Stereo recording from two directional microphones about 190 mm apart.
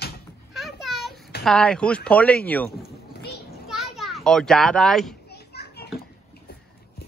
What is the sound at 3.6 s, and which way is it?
Children playing, centre (ahead or behind).